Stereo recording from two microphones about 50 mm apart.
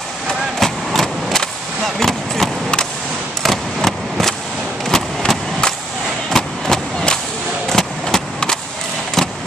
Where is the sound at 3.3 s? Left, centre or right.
Centre.